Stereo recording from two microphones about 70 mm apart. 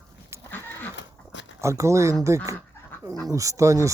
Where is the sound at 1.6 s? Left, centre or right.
Right.